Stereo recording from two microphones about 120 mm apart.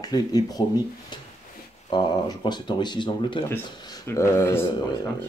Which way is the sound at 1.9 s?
35° left (ahead or behind).